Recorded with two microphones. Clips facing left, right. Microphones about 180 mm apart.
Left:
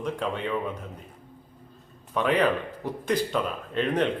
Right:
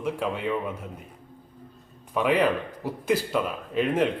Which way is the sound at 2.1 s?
10° right (ahead or behind).